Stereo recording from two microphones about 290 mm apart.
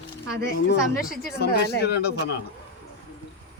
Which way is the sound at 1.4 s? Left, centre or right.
Left.